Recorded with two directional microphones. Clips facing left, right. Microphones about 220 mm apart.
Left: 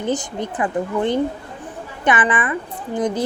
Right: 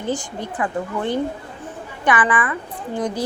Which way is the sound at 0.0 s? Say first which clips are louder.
Left 3 dB; 20° left (ahead or behind).